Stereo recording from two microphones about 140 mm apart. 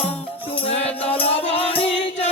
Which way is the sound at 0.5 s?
40° left (ahead or behind).